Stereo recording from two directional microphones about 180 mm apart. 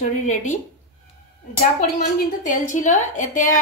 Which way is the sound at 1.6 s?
45° left (ahead or behind).